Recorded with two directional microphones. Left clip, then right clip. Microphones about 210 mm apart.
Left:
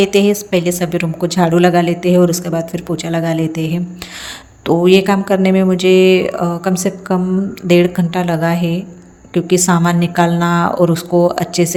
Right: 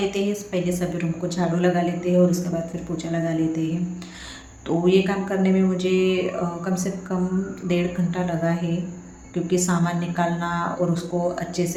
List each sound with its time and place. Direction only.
0.1 s a woman's voice: 45° left (ahead or behind)